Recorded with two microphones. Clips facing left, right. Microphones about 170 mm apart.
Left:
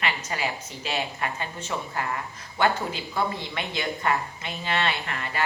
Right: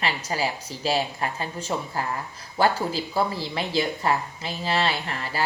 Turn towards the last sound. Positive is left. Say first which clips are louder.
# right 1 dB
turn(degrees=-35)  # may be behind; listen again after turning